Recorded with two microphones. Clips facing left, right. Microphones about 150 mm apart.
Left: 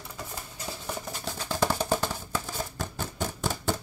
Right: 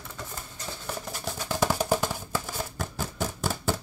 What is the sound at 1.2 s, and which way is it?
Music, 10° right (ahead or behind).